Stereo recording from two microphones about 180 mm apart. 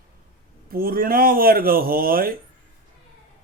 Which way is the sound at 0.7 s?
55° right (ahead or behind).